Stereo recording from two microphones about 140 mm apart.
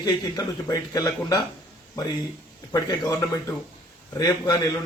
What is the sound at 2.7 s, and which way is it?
Speech, 30° left (ahead or behind).